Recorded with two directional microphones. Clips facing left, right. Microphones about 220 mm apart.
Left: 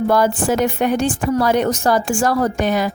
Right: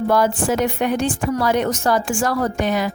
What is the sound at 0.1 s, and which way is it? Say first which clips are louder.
A woman's voice: even; 40° left (ahead or behind).